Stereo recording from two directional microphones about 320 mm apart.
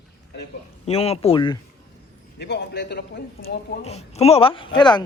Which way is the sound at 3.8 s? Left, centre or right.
Centre.